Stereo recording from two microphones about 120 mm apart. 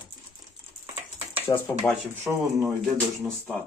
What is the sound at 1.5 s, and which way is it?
Speech, 20° left (ahead or behind).